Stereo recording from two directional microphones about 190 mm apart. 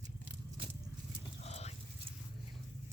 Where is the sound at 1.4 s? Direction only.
35° left (ahead or behind).